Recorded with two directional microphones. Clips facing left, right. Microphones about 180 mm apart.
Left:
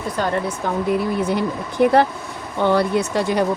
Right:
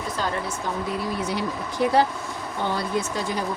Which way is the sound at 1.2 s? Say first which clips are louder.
Left 6 dB; 55° left (ahead or behind).